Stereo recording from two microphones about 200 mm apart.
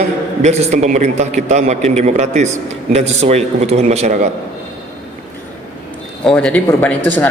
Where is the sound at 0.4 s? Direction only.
35° right (ahead or behind).